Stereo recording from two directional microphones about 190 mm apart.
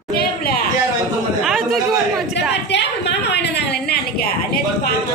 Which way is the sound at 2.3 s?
65° left (ahead or behind).